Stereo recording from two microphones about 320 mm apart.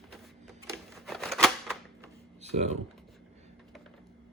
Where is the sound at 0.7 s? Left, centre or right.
Centre.